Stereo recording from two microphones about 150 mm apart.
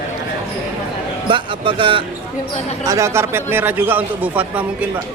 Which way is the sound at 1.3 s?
35° right (ahead or behind).